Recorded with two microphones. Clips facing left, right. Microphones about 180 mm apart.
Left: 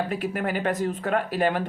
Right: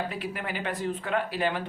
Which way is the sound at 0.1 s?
45° left (ahead or behind).